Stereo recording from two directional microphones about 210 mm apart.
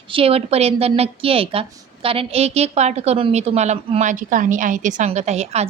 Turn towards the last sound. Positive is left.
turn(degrees=-30)  # may be behind; listen again after turning